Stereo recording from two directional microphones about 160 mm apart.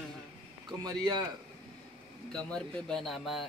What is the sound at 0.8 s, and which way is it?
Speech, 25° right (ahead or behind).